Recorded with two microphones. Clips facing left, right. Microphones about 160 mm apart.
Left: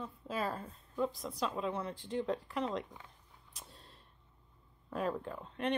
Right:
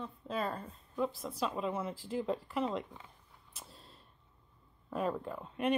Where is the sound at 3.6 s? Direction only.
Centre (ahead or behind).